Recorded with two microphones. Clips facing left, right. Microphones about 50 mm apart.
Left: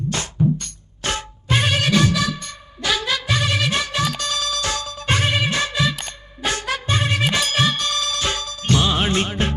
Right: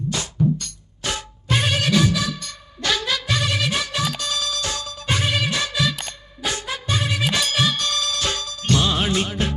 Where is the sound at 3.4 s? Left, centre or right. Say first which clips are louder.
Left 2 dB; left.